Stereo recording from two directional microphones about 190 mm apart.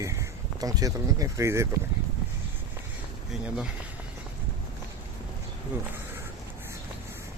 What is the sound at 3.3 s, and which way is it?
Speech, 5° right (ahead or behind).